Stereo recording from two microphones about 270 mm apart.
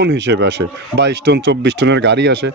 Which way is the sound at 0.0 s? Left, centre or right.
Right.